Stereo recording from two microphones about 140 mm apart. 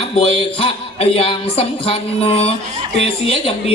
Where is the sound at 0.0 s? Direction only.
45° left (ahead or behind).